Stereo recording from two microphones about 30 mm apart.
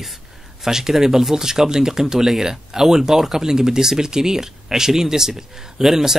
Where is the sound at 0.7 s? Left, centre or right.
Centre.